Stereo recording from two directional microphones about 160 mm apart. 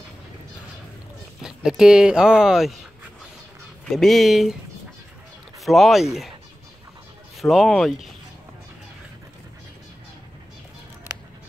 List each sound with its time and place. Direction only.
1.4 s speech: 5° right (ahead or behind)
3.9 s speech: centre (ahead or behind)
5.6 s speech: centre (ahead or behind)
7.3 s speech: centre (ahead or behind)